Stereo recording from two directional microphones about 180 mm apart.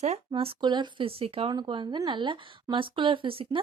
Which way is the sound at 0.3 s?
30° right (ahead or behind).